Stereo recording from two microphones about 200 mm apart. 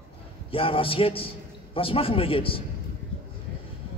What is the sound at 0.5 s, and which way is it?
Speech, 25° left (ahead or behind).